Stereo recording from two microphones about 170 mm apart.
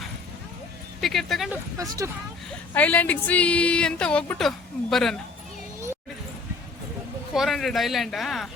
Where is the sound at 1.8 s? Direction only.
20° right (ahead or behind).